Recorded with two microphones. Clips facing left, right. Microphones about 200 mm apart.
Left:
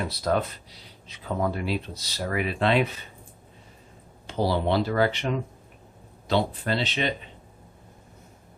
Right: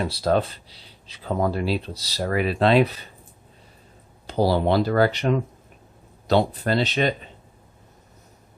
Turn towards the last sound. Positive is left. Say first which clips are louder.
# right 5 dB
turn(degrees=-40)  # may be behind; listen again after turning